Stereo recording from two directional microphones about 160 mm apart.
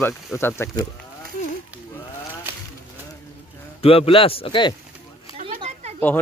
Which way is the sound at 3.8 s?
35° left (ahead or behind).